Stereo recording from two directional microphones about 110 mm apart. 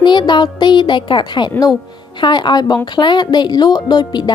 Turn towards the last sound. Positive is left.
turn(degrees=40)  # may be behind; listen again after turning